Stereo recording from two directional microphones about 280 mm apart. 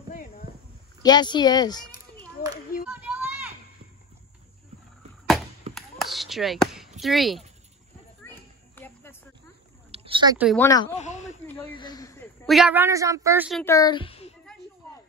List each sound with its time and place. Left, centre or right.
0.1 s a sound: left
1.0 s speech: centre
2.9 s a sound: centre
5.8 s basketball bounce: centre
7.0 s speech: centre
8.7 s music: centre
9.8 s a sound: centre
10.3 s speech: centre
10.6 s speech: centre
11.0 s speech: left
11.7 s speech: centre
12.4 s a woman's voice: centre
13.7 s a woman's voice: centre